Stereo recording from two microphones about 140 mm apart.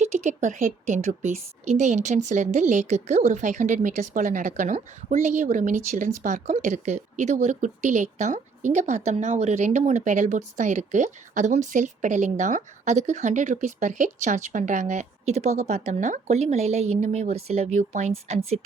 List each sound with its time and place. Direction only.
0.0 s a woman's voice: 55° right (ahead or behind)